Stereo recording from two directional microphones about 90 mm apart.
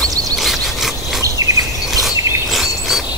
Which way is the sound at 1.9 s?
Centre (ahead or behind).